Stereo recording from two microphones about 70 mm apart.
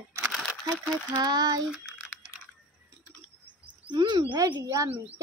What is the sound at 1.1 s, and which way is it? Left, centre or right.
Speech, right.